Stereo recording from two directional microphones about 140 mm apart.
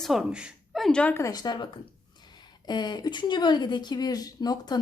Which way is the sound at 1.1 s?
25° left (ahead or behind).